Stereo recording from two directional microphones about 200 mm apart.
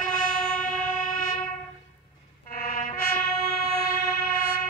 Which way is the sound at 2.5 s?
50° left (ahead or behind).